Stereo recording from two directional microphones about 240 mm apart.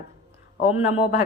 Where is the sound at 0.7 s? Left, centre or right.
Left.